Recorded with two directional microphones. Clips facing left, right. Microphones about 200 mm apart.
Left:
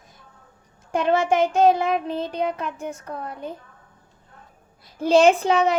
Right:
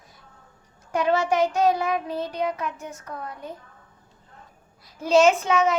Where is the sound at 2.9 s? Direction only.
30° left (ahead or behind).